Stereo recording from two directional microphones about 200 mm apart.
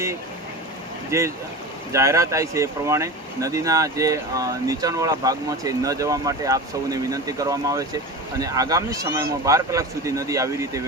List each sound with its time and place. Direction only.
1.1 s speech: 15° right (ahead or behind)